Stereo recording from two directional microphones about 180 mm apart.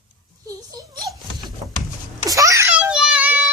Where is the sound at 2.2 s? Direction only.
20° right (ahead or behind).